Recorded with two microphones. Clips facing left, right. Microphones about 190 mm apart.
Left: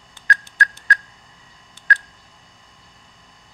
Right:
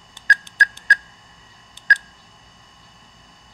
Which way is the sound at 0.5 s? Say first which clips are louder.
Left 1 dB; 20° right (ahead or behind).